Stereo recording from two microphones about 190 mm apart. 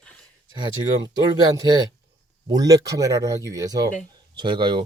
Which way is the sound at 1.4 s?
20° right (ahead or behind).